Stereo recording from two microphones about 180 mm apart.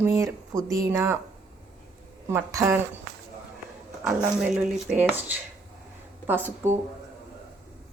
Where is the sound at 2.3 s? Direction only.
20° right (ahead or behind).